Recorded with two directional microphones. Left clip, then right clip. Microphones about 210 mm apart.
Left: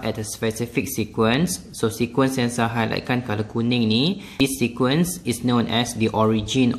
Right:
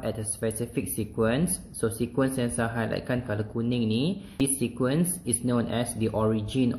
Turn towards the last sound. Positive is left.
turn(degrees=25)  # may be behind; listen again after turning